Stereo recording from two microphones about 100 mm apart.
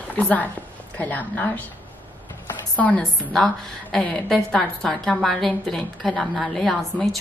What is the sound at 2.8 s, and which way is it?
Speech, 15° left (ahead or behind).